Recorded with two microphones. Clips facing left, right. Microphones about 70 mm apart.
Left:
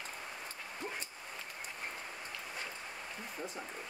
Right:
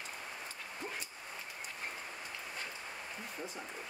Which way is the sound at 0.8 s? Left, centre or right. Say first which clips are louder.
Left 1 dB; centre.